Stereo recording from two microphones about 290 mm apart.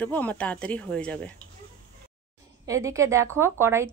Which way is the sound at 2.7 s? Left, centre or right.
Centre.